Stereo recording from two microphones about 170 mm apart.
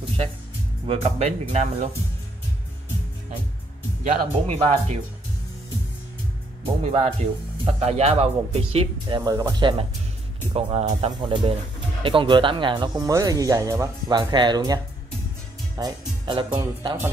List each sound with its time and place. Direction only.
0.8 s speech: 35° right (ahead or behind)
4.0 s speech: 40° right (ahead or behind)
6.6 s speech: 35° right (ahead or behind)
9.2 s speech: 25° right (ahead or behind)
15.8 s speech: 25° right (ahead or behind)